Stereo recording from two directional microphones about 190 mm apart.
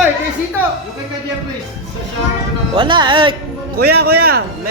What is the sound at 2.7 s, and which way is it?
Speech, 25° right (ahead or behind).